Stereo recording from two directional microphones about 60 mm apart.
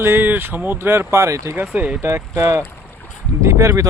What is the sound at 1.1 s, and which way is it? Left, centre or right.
Speech, right.